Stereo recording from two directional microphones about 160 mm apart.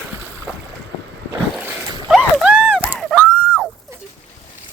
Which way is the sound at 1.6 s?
5° right (ahead or behind).